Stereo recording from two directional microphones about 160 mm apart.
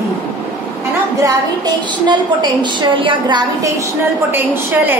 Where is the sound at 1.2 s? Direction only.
25° right (ahead or behind).